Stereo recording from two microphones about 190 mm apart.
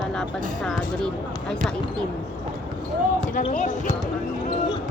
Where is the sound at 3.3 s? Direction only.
45° left (ahead or behind).